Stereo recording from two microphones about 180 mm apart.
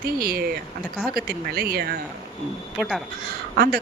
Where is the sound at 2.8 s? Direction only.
Centre (ahead or behind).